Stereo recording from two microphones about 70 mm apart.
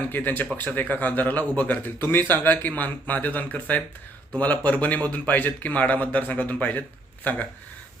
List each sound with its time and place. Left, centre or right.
0.1 s speech: left